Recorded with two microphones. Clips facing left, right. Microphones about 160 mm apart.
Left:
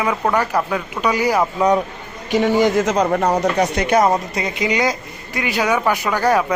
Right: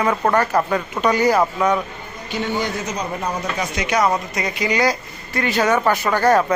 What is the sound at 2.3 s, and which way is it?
A man's voice, 90° left.